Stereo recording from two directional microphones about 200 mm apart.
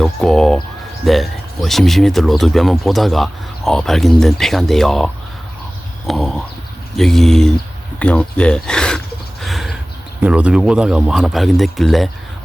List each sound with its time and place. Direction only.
0.0 s speech: centre (ahead or behind)
9.4 s a sound: centre (ahead or behind)
10.2 s speech: 5° right (ahead or behind)